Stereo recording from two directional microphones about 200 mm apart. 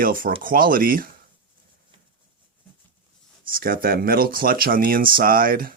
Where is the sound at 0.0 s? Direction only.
45° right (ahead or behind).